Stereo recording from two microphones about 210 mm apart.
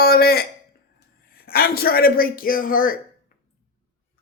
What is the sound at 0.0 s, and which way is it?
A man's voice, 45° left (ahead or behind).